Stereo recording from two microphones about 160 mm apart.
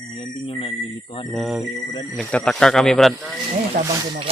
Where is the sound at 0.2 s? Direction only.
35° left (ahead or behind).